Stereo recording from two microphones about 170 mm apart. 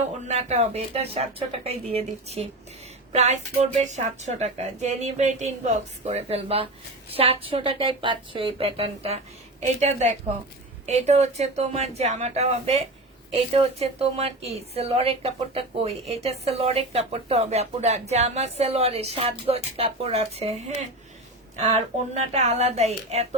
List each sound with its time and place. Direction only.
0.3 s a woman's voice: 40° right (ahead or behind)